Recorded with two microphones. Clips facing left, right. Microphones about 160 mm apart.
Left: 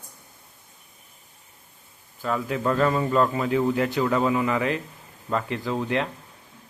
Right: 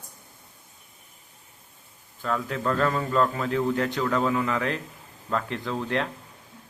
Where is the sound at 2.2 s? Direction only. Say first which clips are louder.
Left 2 dB; 5° left (ahead or behind).